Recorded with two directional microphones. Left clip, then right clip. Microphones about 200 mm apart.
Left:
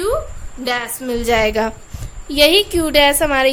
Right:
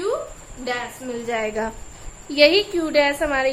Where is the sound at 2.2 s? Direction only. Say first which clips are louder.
Left 3 dB; 35° left (ahead or behind).